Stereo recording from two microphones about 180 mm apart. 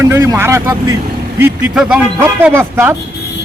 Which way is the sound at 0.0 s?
15° right (ahead or behind).